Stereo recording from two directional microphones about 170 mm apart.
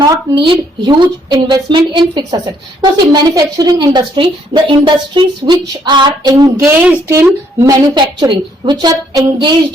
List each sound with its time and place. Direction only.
0.0 s a woman's voice: 30° right (ahead or behind)